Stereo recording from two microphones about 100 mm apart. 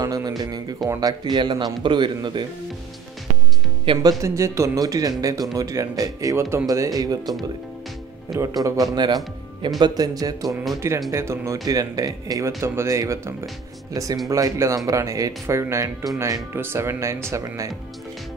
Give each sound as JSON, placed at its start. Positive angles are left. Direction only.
{"t": 0.0, "sound": "speech", "side_deg": -40}
{"t": 1.3, "sound": "a man's voice", "side_deg": -50}
{"t": 3.9, "sound": "speech", "side_deg": -60}
{"t": 4.2, "sound": "speech", "side_deg": -30}
{"t": 8.6, "sound": "speech", "side_deg": -35}
{"t": 10.8, "sound": "speech", "side_deg": -25}
{"t": 11.6, "sound": "speech", "side_deg": -40}